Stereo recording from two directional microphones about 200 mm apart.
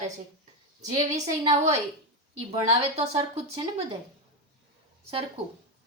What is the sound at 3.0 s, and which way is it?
Speech, 30° right (ahead or behind).